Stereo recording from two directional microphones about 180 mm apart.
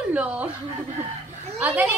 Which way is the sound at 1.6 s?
10° right (ahead or behind).